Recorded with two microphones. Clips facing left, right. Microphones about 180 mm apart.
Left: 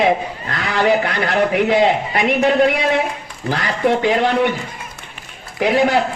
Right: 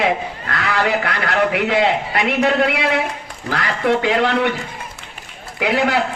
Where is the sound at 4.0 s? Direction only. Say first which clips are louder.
Left 1 dB; 20° left (ahead or behind).